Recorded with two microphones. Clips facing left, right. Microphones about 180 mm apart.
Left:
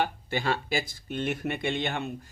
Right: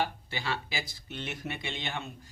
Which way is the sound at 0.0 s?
50° left (ahead or behind).